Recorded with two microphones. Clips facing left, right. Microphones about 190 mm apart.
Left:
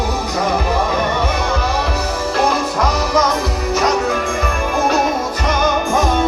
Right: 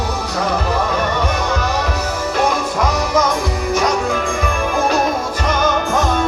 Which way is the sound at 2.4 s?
Centre (ahead or behind).